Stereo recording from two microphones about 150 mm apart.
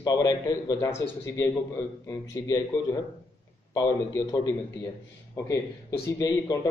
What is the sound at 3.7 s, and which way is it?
Speech, 25° left (ahead or behind).